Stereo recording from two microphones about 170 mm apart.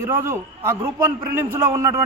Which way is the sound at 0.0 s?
15° right (ahead or behind).